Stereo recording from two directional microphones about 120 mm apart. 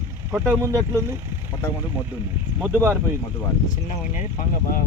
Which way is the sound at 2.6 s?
20° right (ahead or behind).